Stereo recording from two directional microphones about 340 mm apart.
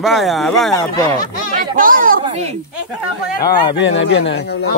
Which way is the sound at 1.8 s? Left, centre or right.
Right.